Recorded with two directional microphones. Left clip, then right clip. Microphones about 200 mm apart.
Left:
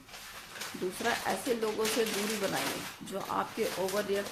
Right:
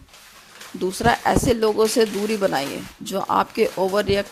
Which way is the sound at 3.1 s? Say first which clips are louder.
Right 14 dB; 55° right (ahead or behind).